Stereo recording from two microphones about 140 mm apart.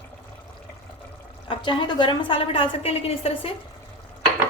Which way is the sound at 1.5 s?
35° left (ahead or behind).